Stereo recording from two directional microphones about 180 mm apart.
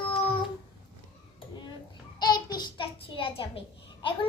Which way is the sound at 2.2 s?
25° left (ahead or behind).